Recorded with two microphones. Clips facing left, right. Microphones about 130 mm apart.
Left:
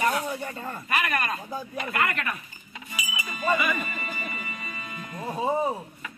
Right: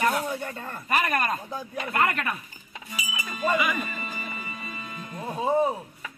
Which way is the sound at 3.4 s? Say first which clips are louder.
Even; 15° right (ahead or behind).